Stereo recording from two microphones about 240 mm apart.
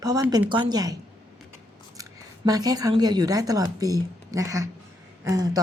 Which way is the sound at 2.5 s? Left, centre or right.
Centre.